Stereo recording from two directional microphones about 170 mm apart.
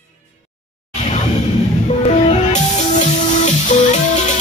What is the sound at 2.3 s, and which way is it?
Music, 45° left (ahead or behind).